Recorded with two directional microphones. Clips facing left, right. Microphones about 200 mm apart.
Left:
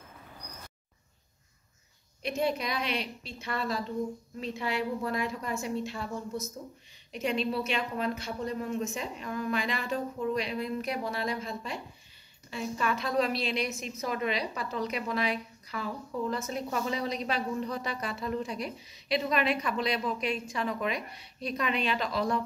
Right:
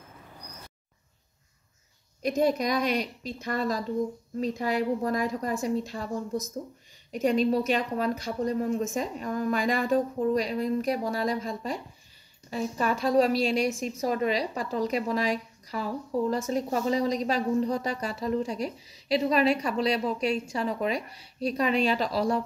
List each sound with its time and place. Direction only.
2.2 s a woman's voice: 40° right (ahead or behind)
7.1 s a woman's voice: 45° right (ahead or behind)